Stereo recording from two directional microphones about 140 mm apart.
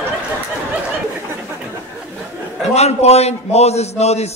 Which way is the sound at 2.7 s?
50° left (ahead or behind).